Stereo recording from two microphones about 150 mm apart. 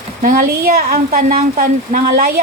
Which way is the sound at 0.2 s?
65° right (ahead or behind).